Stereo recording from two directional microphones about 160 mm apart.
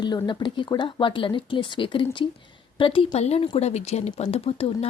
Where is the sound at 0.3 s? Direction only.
30° left (ahead or behind).